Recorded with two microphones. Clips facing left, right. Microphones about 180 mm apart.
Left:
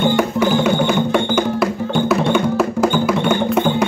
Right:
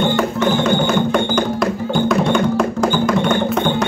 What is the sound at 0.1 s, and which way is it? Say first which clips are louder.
Music: left 1 dB; 10° left (ahead or behind).